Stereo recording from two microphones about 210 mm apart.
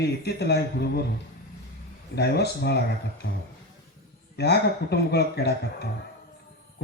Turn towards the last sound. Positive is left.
turn(degrees=50)  # may be behind; listen again after turning